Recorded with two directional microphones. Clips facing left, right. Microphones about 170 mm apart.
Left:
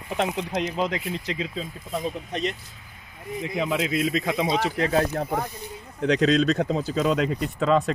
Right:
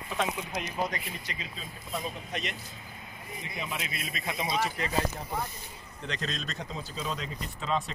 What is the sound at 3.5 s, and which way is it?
Speech, 90° left.